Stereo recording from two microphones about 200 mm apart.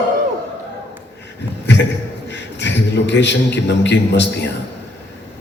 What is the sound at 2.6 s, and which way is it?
A man's voice, 60° left (ahead or behind).